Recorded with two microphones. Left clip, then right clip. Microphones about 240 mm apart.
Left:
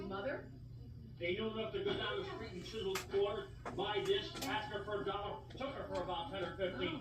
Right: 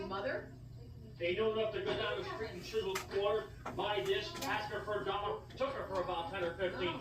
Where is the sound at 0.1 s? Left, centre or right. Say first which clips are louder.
Right 2 dB; right.